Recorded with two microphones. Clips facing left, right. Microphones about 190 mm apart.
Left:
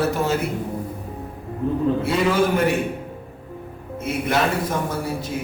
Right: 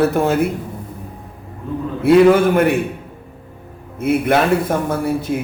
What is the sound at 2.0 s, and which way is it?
Speech, 60° right (ahead or behind).